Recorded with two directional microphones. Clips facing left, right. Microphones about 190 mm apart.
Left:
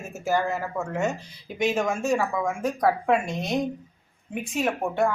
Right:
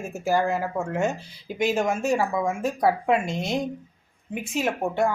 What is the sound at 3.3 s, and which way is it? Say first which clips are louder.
Chopping: right 2 dB; 25° right (ahead or behind).